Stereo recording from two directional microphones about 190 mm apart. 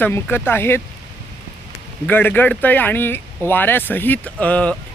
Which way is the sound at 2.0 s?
10° left (ahead or behind).